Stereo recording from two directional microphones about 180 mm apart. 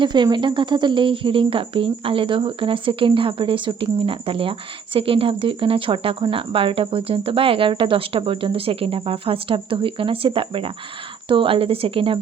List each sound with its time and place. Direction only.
0.0 s speech: 25° right (ahead or behind)